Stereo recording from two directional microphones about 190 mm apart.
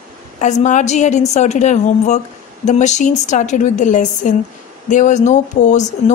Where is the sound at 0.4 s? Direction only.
40° left (ahead or behind).